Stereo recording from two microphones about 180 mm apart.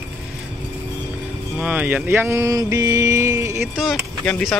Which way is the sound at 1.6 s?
10° right (ahead or behind).